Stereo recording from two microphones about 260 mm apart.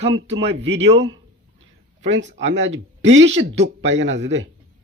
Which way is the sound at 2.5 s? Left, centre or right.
Right.